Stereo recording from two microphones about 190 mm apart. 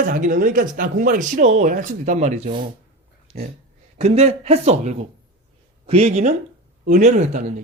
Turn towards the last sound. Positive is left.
turn(degrees=-40)  # may be behind; listen again after turning